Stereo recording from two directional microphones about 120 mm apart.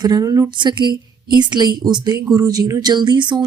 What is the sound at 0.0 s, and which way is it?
Speech, 35° right (ahead or behind).